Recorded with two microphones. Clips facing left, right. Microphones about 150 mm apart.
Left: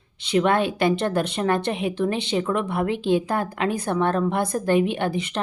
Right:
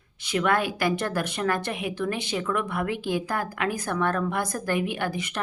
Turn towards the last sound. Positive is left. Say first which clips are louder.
# left 5 dB
turn(degrees=25)  # may be behind; listen again after turning